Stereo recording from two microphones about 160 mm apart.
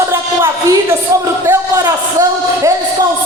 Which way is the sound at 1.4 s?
20° right (ahead or behind).